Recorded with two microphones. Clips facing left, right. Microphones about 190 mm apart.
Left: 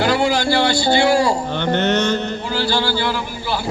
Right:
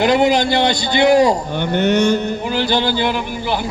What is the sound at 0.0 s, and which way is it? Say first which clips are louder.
Speech: right 3 dB; 20° right (ahead or behind).